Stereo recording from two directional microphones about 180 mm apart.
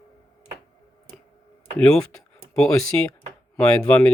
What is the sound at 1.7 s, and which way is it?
Speech, 5° left (ahead or behind).